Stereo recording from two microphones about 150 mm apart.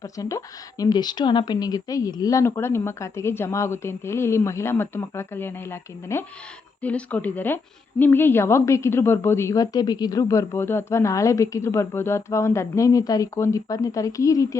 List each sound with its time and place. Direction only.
0.0 s a woman's voice: 20° left (ahead or behind)